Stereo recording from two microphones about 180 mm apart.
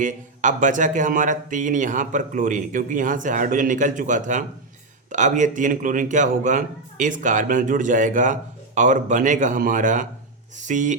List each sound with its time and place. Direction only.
0.0 s a man's voice: 45° right (ahead or behind)